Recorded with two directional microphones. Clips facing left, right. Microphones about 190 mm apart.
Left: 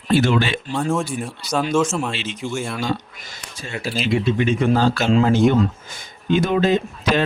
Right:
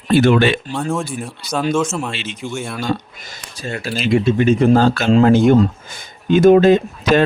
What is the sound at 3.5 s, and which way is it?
Speech, 40° right (ahead or behind).